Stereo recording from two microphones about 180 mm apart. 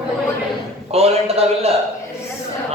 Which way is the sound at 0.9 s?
35° right (ahead or behind).